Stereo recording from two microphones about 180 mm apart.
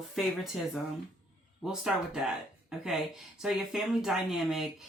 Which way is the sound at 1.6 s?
5° right (ahead or behind).